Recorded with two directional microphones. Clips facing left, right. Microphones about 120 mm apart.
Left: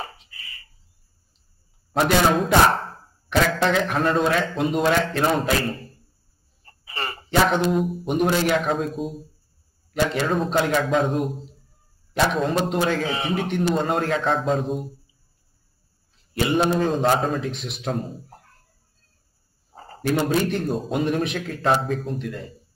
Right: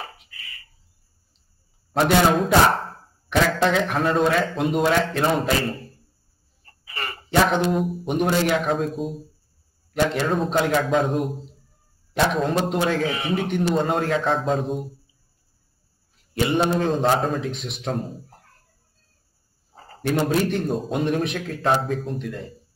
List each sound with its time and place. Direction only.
2.0 s a man's voice: centre (ahead or behind)
6.6 s a sound: 30° left (ahead or behind)
7.2 s a man's voice: centre (ahead or behind)
13.0 s a man's voice: 30° left (ahead or behind)
13.4 s a man's voice: centre (ahead or behind)
16.3 s a man's voice: centre (ahead or behind)
19.7 s a sound: 35° left (ahead or behind)
20.0 s a man's voice: centre (ahead or behind)